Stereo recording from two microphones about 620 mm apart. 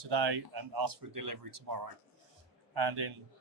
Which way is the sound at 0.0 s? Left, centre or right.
Right.